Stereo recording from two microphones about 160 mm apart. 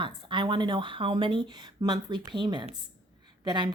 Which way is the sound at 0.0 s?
30° right (ahead or behind).